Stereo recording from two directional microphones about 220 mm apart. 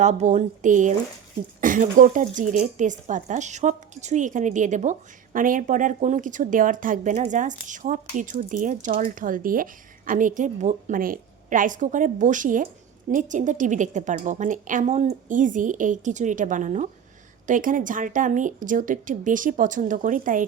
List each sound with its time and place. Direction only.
0.0 s speech: 30° right (ahead or behind)